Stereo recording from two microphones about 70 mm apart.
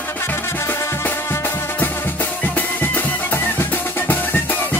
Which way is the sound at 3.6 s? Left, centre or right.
Left.